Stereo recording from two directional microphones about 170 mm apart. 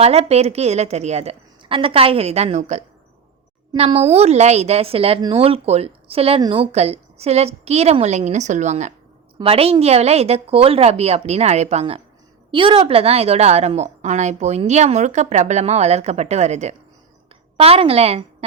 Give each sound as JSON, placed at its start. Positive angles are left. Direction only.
{"t": 0.0, "sound": "a woman's voice", "side_deg": -40}